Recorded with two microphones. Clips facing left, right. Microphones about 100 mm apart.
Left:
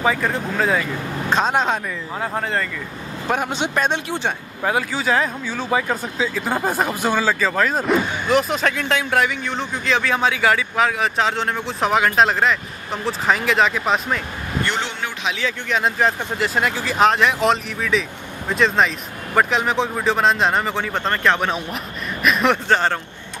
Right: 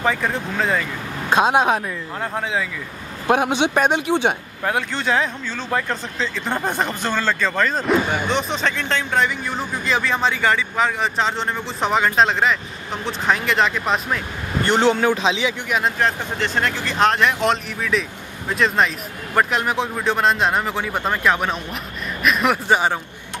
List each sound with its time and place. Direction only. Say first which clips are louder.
0.0 s speech: left 1 dB; centre (ahead or behind)
1.3 s a man's voice: right 3 dB; 10° right (ahead or behind)
2.1 s speech: left 1 dB; centre (ahead or behind)
3.3 s a man's voice: right 5 dB; 15° right (ahead or behind)
4.6 s speech: left 1 dB; centre (ahead or behind)
14.7 s speech: right 9 dB; 40° right (ahead or behind)
15.2 s speech: right 4 dB; 20° right (ahead or behind)
15.7 s speech: left 3 dB; centre (ahead or behind)